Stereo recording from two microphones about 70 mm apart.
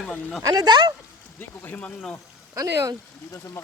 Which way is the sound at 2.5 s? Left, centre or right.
Right.